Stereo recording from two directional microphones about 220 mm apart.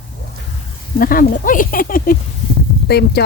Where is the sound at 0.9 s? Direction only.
40° left (ahead or behind).